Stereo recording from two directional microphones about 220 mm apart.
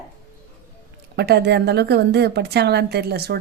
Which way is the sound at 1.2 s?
50° right (ahead or behind).